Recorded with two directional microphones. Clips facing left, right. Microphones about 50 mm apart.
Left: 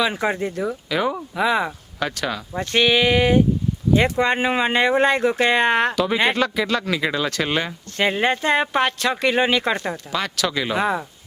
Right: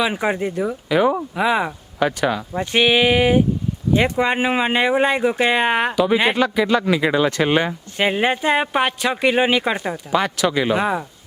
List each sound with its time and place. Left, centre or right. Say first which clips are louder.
0.0 s speech: right 1 dB; centre